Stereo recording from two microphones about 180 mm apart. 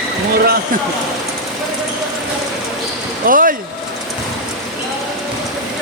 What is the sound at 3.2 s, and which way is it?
Speech, 50° right (ahead or behind).